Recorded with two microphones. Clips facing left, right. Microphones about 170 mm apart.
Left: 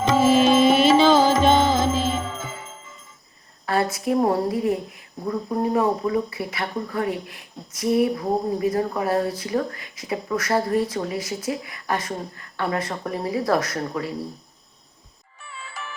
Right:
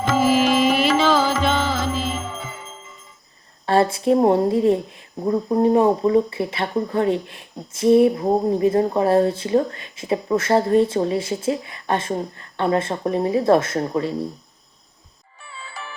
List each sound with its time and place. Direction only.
0.5 s music: 35° left (ahead or behind)
3.7 s speech: 30° right (ahead or behind)
15.4 s music: 30° right (ahead or behind)